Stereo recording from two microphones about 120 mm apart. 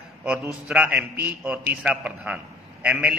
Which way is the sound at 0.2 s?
10° right (ahead or behind).